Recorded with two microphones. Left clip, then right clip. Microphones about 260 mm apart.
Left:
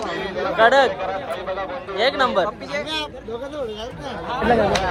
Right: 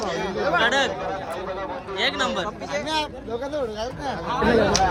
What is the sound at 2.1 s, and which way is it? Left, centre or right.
Speech, centre.